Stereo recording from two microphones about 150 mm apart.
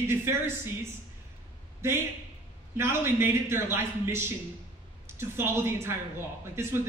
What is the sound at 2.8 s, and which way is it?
Speech, 15° right (ahead or behind).